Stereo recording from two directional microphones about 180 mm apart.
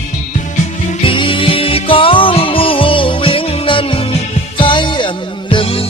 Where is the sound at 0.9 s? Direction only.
30° left (ahead or behind).